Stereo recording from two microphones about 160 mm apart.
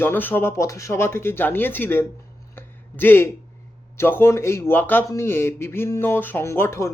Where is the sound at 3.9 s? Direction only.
15° left (ahead or behind).